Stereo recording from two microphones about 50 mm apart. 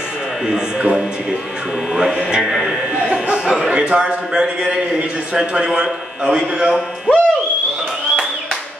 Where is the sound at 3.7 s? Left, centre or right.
Right.